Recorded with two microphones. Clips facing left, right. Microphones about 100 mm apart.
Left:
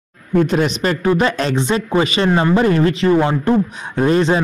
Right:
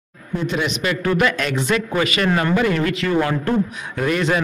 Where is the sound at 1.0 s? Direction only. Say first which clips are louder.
Left 3 dB; 25° left (ahead or behind).